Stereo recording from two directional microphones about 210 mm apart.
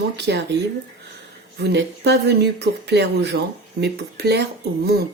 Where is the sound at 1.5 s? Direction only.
55° right (ahead or behind).